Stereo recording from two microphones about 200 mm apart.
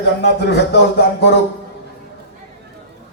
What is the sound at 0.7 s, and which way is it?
Music, 55° left (ahead or behind).